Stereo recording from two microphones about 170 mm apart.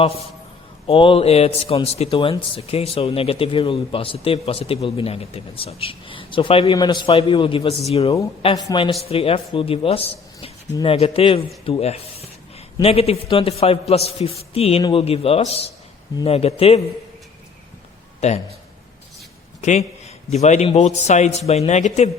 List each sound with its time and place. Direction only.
0.9 s a man's voice: 35° left (ahead or behind)
18.2 s speech: 40° left (ahead or behind)
19.6 s speech: 40° left (ahead or behind)